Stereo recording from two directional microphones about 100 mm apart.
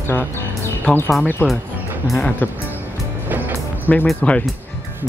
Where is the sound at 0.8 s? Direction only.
20° left (ahead or behind).